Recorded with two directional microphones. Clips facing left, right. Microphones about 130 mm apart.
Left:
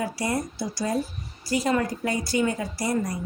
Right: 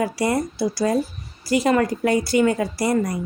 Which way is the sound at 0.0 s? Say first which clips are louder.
Right 6 dB; 70° right (ahead or behind).